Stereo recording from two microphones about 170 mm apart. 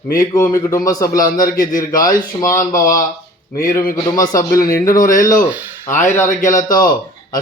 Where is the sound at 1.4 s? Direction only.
55° left (ahead or behind).